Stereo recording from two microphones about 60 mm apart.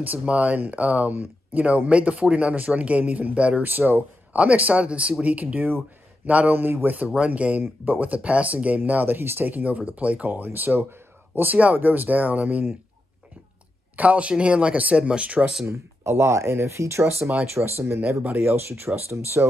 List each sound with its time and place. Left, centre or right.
0.0 s speech: right
3.6 s a man's voice: right
7.2 s speech: right
13.9 s speech: right
15.6 s speech: right
17.2 s speech: centre
17.6 s speech: right